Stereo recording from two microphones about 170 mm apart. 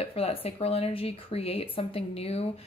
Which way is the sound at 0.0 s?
35° left (ahead or behind).